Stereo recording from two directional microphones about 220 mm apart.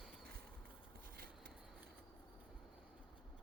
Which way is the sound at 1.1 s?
40° right (ahead or behind).